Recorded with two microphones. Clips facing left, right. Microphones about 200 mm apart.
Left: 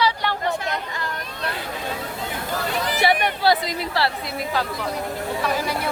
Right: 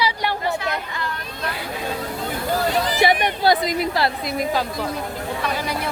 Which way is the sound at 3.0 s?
15° right (ahead or behind).